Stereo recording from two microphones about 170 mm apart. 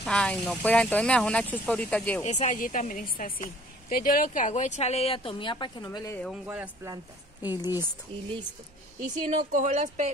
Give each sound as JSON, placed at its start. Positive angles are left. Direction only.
{"t": 0.0, "sound": "speech", "side_deg": 5}
{"t": 2.2, "sound": "speech", "side_deg": 40}
{"t": 5.9, "sound": "speech", "side_deg": 15}
{"t": 6.2, "sound": "a man's voice", "side_deg": -5}
{"t": 7.5, "sound": "speech", "side_deg": 25}
{"t": 9.1, "sound": "speech", "side_deg": -45}